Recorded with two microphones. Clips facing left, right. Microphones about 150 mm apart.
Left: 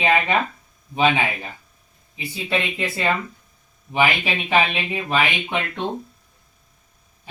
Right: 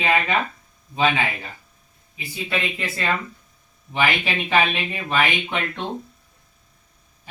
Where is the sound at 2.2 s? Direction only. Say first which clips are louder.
Left 2 dB; 20° left (ahead or behind).